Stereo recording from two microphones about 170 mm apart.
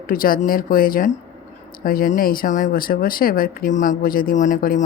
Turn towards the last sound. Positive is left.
turn(degrees=55)  # may be behind; listen again after turning